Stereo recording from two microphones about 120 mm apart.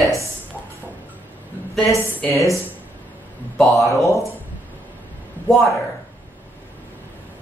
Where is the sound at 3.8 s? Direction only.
25° left (ahead or behind).